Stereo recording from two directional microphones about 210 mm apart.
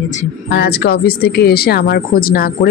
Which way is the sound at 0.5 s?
50° left (ahead or behind).